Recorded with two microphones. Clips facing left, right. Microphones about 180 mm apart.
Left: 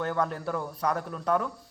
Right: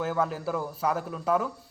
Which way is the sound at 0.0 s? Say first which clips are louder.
Right 1 dB; 5° right (ahead or behind).